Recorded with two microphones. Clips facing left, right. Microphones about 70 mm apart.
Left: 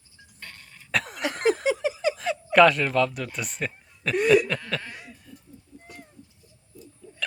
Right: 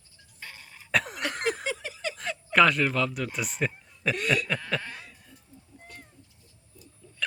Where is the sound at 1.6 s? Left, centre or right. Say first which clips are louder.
Left 9 dB; centre.